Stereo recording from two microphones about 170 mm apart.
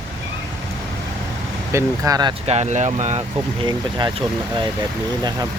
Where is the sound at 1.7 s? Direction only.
20° right (ahead or behind).